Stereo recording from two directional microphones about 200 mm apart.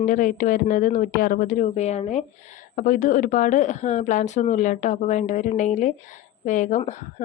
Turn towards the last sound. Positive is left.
turn(degrees=35)  # may be behind; listen again after turning